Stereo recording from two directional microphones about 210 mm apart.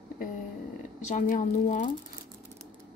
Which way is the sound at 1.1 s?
40° left (ahead or behind).